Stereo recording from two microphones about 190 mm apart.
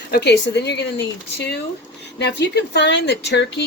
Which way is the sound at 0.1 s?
60° left (ahead or behind).